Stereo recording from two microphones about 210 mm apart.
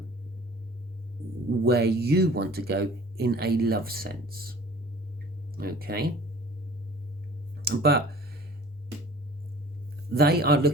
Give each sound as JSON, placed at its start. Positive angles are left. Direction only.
{"t": 1.6, "sound": "speech", "side_deg": -50}
{"t": 5.5, "sound": "speech", "side_deg": -45}
{"t": 7.6, "sound": "a sound", "side_deg": -50}
{"t": 10.2, "sound": "speech", "side_deg": -50}